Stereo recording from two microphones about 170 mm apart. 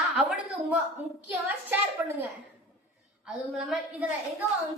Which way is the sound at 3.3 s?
Centre (ahead or behind).